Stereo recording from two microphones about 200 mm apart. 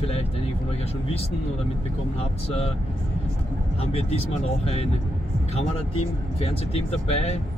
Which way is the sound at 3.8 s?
30° left (ahead or behind).